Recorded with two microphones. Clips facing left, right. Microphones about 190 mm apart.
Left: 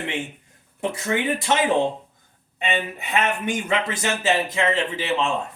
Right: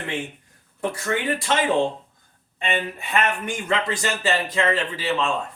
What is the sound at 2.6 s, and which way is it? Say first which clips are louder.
Speech: even; 20° left (ahead or behind).